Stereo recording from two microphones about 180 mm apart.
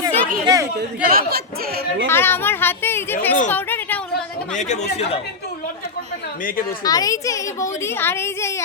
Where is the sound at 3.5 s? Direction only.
10° left (ahead or behind).